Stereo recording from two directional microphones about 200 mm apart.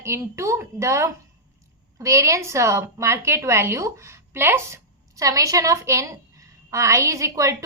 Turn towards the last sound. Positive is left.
turn(degrees=-15)  # may be behind; listen again after turning